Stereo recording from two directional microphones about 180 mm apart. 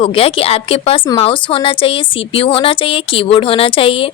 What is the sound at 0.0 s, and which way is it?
A woman's voice, 30° left (ahead or behind).